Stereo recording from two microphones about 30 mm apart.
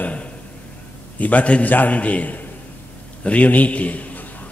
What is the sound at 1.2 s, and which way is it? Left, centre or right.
Speech, left.